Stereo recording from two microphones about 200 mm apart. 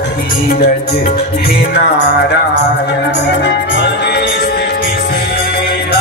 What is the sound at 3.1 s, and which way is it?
Music, 60° left (ahead or behind).